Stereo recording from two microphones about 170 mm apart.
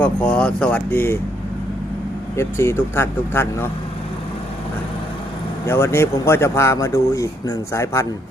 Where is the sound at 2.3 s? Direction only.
15° left (ahead or behind).